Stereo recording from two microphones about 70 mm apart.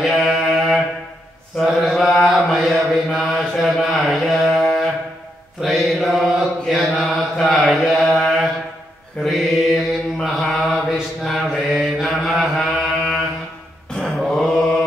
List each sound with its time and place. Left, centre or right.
0.0 s mantra: centre